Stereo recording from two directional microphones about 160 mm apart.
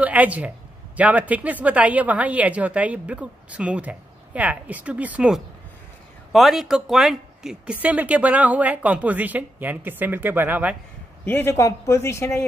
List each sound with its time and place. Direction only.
0.0 s speech: 10° right (ahead or behind)
11.2 s speech: 15° left (ahead or behind)